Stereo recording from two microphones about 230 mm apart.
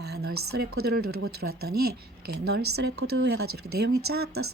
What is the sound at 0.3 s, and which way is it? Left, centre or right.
Speech, right.